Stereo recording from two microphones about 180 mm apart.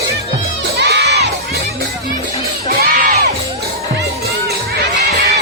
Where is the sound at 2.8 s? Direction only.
60° right (ahead or behind).